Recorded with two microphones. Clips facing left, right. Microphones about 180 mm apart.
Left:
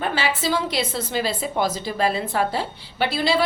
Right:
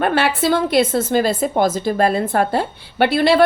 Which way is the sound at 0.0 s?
60° right (ahead or behind).